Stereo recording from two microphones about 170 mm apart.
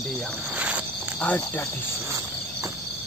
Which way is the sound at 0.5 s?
5° right (ahead or behind).